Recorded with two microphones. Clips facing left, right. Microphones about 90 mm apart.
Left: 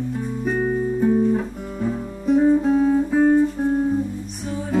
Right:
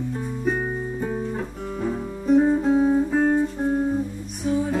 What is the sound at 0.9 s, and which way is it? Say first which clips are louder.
Guitar: left 9 dB; 5° right (ahead or behind).